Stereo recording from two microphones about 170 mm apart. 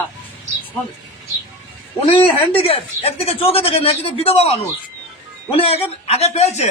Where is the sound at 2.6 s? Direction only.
35° left (ahead or behind).